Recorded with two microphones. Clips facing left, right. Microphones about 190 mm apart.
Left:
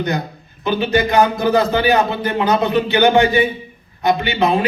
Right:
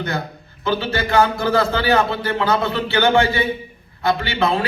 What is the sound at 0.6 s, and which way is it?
A man's voice, 15° left (ahead or behind).